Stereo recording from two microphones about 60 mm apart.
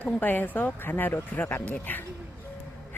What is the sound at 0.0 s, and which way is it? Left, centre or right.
Speech, left.